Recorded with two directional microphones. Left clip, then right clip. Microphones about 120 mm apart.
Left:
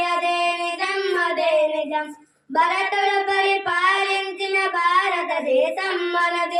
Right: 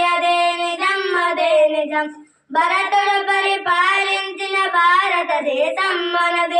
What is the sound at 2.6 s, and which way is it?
Child singing, 35° left (ahead or behind).